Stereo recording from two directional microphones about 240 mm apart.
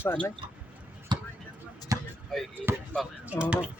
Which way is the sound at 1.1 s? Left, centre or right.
Centre.